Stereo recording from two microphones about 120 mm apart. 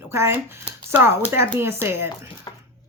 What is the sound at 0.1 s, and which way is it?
A woman's voice, 20° right (ahead or behind).